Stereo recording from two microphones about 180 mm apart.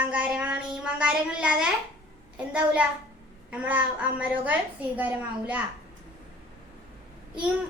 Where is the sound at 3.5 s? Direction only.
10° right (ahead or behind).